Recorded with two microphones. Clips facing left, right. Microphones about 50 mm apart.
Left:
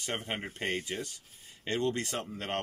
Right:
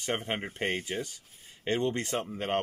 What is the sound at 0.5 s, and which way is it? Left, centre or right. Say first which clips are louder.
Speech: right 1 dB; right.